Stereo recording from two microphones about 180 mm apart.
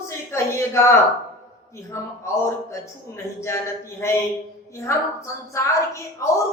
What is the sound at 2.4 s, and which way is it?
A woman's voice, 15° left (ahead or behind).